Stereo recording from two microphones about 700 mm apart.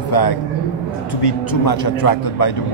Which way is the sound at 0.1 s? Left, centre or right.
Left.